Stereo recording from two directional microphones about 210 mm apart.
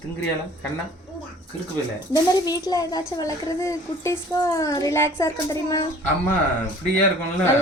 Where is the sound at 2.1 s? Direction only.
20° left (ahead or behind).